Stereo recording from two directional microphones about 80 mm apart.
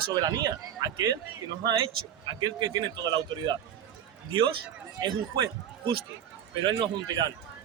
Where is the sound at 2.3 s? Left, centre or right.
Right.